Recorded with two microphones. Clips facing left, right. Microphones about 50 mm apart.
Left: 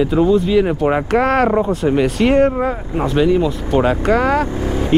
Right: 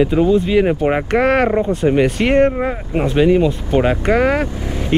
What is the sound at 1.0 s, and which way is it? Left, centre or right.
Speech, centre.